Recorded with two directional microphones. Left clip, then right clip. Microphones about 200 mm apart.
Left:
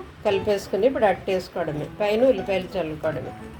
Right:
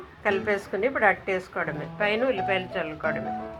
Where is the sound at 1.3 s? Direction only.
5° left (ahead or behind).